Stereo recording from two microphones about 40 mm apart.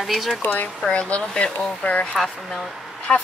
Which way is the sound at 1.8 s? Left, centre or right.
Left.